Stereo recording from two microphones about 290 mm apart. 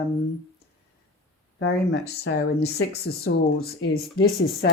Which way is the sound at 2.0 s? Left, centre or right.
Left.